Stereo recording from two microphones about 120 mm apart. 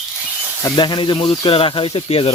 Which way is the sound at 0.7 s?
40° left (ahead or behind).